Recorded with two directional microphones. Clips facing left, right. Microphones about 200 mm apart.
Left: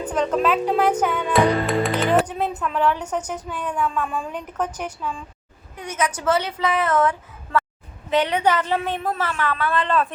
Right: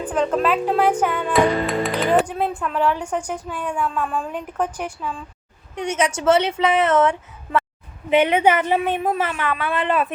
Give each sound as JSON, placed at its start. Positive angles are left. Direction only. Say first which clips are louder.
{"t": 0.1, "sound": "a woman's voice", "louder": "right 1 dB", "side_deg": -5}
{"t": 5.9, "sound": "speech", "louder": "right 4 dB", "side_deg": -25}
{"t": 8.1, "sound": "a woman's voice", "louder": "right 3 dB", "side_deg": -10}